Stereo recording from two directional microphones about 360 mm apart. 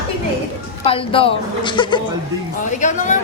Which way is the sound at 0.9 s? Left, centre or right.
Centre.